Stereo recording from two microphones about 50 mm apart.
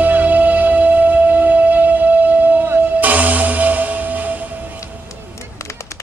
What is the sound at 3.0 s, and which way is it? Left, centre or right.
Music, right.